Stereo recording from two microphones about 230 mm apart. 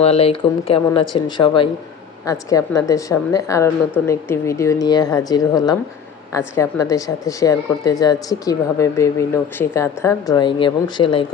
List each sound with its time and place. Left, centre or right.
0.0 s speech: left